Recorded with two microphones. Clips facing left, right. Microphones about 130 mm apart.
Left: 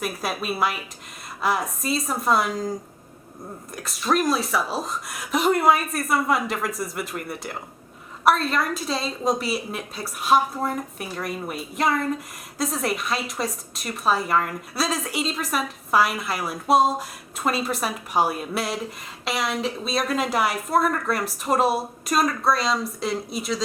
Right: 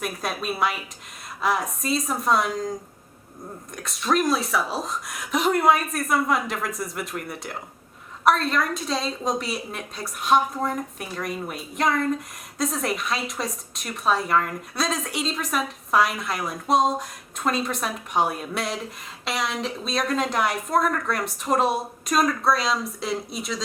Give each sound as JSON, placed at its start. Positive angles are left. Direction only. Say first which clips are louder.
{"t": 0.0, "sound": "a woman's voice", "louder": "left 1 dB", "side_deg": 5}
{"t": 3.8, "sound": "a woman's voice", "louder": "even", "side_deg": 0}